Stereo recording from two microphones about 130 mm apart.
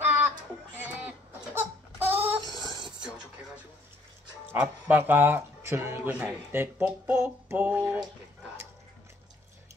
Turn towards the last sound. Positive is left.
turn(degrees=-10)  # may be behind; listen again after turning